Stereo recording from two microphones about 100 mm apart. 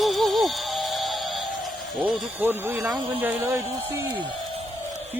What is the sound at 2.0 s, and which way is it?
Speech, 20° right (ahead or behind).